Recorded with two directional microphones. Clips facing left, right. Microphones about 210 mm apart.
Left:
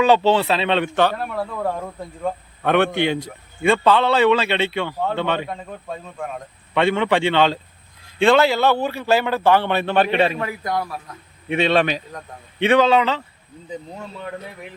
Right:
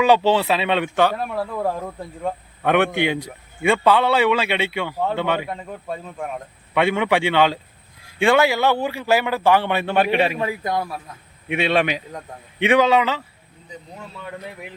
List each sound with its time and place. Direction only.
0.0 s a man's voice: 10° right (ahead or behind)
2.6 s a man's voice: 15° right (ahead or behind)
6.7 s a man's voice: 10° right (ahead or behind)
10.4 s a man's voice: 25° right (ahead or behind)
11.4 s a man's voice: 10° right (ahead or behind)